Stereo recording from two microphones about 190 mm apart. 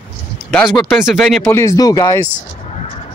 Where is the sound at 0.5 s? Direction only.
5° left (ahead or behind).